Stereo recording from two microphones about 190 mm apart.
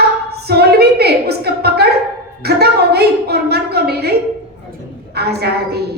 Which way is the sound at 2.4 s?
60° right (ahead or behind).